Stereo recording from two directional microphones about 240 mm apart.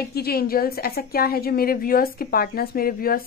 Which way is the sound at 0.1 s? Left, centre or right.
Left.